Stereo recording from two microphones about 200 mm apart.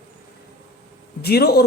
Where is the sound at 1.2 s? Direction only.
50° left (ahead or behind).